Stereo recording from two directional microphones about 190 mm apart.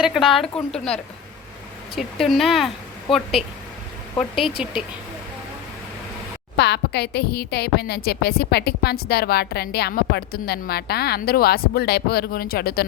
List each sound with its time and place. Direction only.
0.2 s a woman's voice: 30° left (ahead or behind)
0.4 s speech: 5° left (ahead or behind)
2.0 s speech: centre (ahead or behind)
6.6 s a woman's voice: 60° left (ahead or behind)